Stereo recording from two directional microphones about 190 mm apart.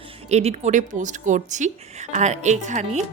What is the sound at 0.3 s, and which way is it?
Speech, 35° right (ahead or behind).